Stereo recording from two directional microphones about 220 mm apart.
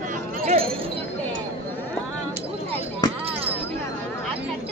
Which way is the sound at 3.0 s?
20° left (ahead or behind).